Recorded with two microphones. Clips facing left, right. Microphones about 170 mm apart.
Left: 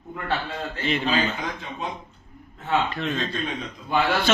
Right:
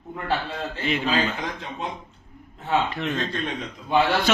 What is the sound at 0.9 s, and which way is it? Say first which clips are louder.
Speech: even; 10° right (ahead or behind).